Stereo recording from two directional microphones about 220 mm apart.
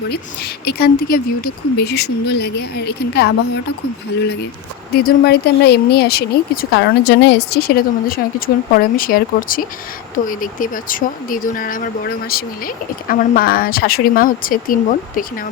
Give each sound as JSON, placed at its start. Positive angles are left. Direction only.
{"t": 0.1, "sound": "speech", "side_deg": 45}
{"t": 4.9, "sound": "speech", "side_deg": 45}